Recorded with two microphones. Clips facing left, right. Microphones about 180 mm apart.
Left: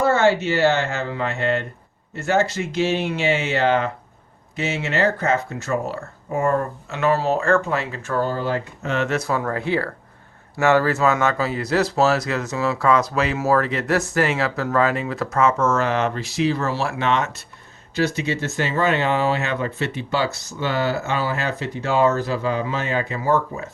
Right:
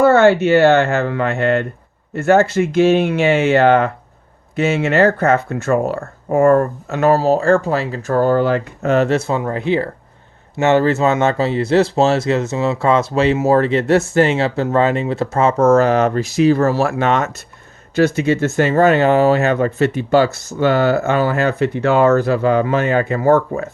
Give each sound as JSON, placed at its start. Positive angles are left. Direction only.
{"t": 0.0, "sound": "speech", "side_deg": -60}
{"t": 8.3, "sound": "speech", "side_deg": -65}
{"t": 8.9, "sound": "speech", "side_deg": -40}
{"t": 9.1, "sound": "speech", "side_deg": -25}